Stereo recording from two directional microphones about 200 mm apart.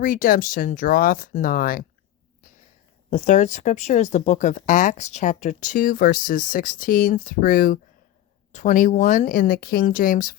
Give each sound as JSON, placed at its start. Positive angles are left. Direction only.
{"t": 0.0, "sound": "speech", "side_deg": 45}
{"t": 3.1, "sound": "speech", "side_deg": 35}